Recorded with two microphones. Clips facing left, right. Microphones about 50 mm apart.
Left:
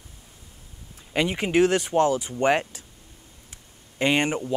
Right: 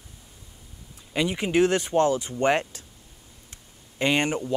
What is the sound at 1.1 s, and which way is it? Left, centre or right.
Speech, left.